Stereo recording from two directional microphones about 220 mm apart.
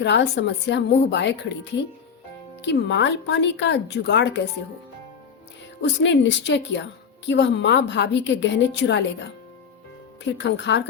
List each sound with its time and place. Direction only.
0.0 s speech: 50° left (ahead or behind)
2.6 s speech: 55° left (ahead or behind)
6.0 s speech: 50° left (ahead or behind)
10.3 s speech: 55° left (ahead or behind)